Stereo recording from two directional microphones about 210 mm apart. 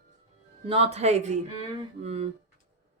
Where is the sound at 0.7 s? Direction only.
30° right (ahead or behind).